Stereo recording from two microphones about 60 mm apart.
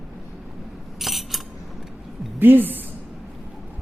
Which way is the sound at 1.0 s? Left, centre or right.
Centre.